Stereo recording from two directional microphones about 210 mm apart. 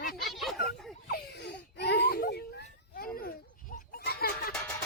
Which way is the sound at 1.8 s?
50° left (ahead or behind).